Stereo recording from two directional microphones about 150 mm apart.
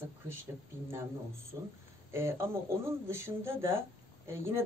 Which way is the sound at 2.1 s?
15° right (ahead or behind).